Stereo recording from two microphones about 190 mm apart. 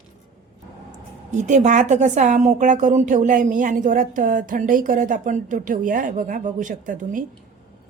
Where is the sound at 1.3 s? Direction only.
40° right (ahead or behind).